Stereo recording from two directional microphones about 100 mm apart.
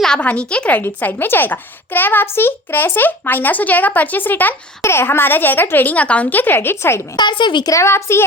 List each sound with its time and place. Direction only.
0.0 s a woman's voice: 10° left (ahead or behind)
7.2 s a woman's voice: 50° left (ahead or behind)
7.7 s a woman's voice: 25° left (ahead or behind)